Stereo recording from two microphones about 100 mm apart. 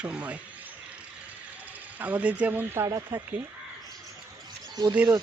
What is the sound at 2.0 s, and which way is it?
A man's voice, 15° right (ahead or behind).